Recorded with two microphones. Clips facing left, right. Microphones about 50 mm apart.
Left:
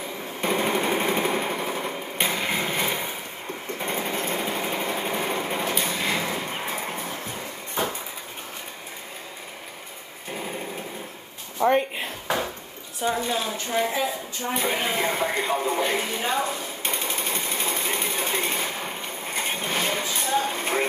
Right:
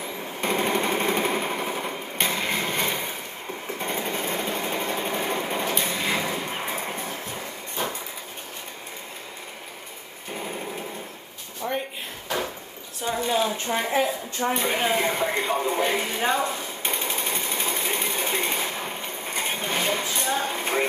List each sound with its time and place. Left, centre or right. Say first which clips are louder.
0.4 s jackhammer: even; centre
3.7 s light engine: left 1 dB; centre
10.3 s light engine: even; centre
11.6 s a sound: left 9 dB; left
13.0 s speech: right 1 dB; centre
14.5 s speech: right 1 dB; centre
16.8 s sewing machine: even; centre